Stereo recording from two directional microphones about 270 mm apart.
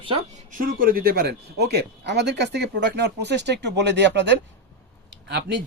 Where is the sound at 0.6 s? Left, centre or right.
Right.